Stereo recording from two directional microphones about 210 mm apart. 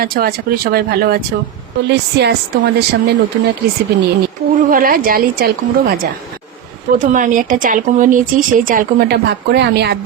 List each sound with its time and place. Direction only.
0.0 s speech: 45° right (ahead or behind)
6.9 s speech: 40° right (ahead or behind)